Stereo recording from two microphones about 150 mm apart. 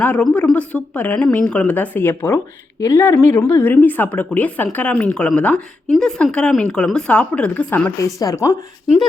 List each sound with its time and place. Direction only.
0.0 s a woman's voice: 10° left (ahead or behind)
8.0 s speech: 25° left (ahead or behind)